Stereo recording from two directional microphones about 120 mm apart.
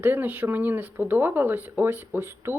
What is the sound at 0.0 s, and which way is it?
Speech, 15° right (ahead or behind).